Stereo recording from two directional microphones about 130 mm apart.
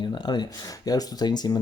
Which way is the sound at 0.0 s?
35° left (ahead or behind).